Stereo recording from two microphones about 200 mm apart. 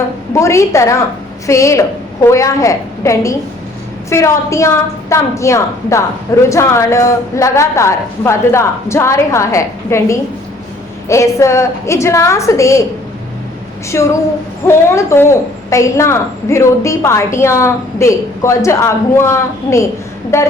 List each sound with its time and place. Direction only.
0.3 s a woman's voice: 15° left (ahead or behind)
13.9 s a woman's voice: 15° left (ahead or behind)